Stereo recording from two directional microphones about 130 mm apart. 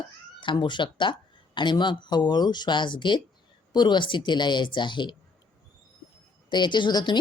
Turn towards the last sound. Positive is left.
turn(degrees=35)  # may be behind; listen again after turning